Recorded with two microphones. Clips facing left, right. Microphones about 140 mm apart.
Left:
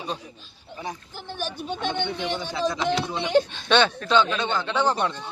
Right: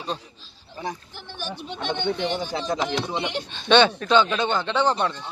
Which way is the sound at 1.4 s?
45° left (ahead or behind).